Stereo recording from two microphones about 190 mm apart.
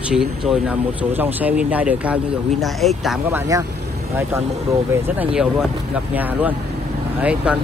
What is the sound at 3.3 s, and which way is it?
Speech, 15° right (ahead or behind).